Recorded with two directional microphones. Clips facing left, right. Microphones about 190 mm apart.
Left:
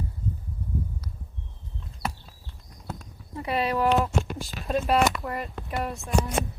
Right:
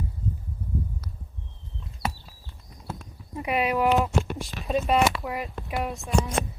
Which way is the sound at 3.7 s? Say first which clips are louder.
Even; 5° right (ahead or behind).